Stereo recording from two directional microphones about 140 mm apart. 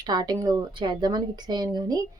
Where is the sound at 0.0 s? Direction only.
30° right (ahead or behind).